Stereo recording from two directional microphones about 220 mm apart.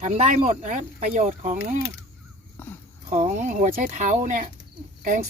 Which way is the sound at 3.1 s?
30° right (ahead or behind).